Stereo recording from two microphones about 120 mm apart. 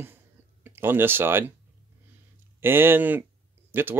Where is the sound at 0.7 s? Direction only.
20° right (ahead or behind).